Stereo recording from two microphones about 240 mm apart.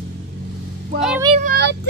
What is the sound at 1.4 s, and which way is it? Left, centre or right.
Child singing, right.